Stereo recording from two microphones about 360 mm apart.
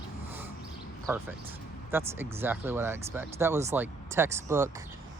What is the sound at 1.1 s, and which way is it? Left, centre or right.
Speech, centre.